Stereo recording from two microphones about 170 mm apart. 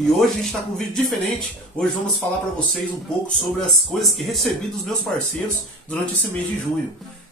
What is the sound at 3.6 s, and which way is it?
Speech, centre (ahead or behind).